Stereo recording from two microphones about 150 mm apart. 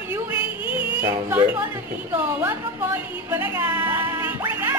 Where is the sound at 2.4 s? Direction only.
15° right (ahead or behind).